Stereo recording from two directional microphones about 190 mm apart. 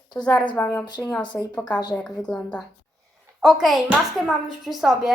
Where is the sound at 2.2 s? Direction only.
5° left (ahead or behind).